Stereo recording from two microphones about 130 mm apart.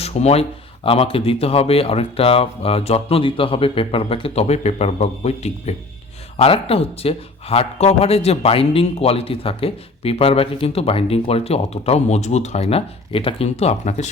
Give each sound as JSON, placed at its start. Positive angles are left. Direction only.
{"t": 0.0, "sound": "speech", "side_deg": 55}